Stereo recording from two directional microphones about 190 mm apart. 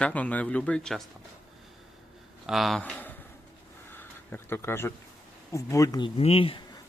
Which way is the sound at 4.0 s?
10° left (ahead or behind).